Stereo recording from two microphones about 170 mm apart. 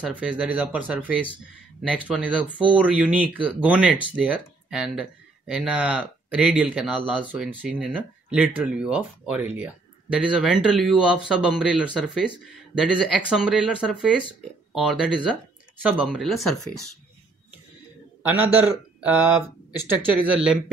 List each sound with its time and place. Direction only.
0.0 s speech: 5° right (ahead or behind)
18.4 s a man's voice: 10° right (ahead or behind)